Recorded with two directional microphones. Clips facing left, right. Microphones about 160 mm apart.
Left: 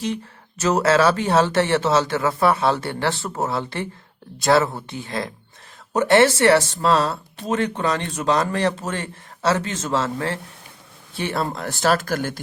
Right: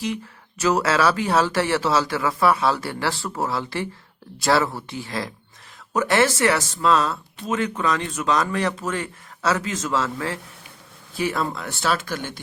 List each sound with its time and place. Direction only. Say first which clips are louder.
0.6 s speech: left 2 dB; 25° left (ahead or behind); by 12.4 s 45° left (ahead or behind)